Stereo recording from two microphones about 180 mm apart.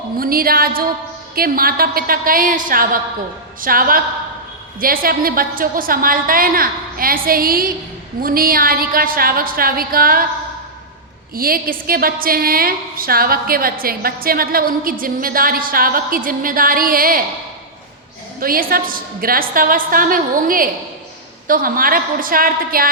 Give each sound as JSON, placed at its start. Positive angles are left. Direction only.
{"t": 0.2, "sound": "a woman's voice", "side_deg": -55}
{"t": 11.3, "sound": "a woman's voice", "side_deg": -55}
{"t": 18.3, "sound": "a woman's voice", "side_deg": -55}